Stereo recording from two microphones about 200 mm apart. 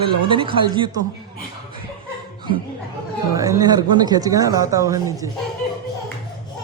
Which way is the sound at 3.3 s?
15° right (ahead or behind).